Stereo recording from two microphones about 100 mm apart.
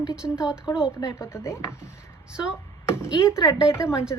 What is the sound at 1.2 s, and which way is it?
Speech, 25° left (ahead or behind).